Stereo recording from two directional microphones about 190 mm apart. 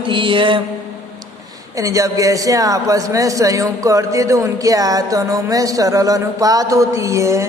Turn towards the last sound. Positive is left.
turn(degrees=-15)  # may be behind; listen again after turning